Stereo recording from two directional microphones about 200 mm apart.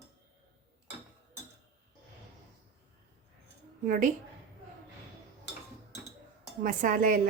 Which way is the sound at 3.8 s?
40° right (ahead or behind).